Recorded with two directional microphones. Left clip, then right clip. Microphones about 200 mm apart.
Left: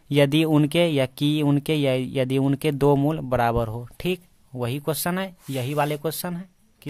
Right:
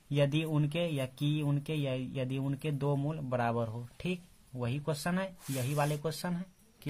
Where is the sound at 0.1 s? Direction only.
45° left (ahead or behind).